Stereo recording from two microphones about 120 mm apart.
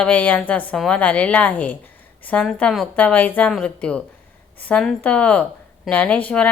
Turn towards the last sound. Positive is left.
turn(degrees=10)  # may be behind; listen again after turning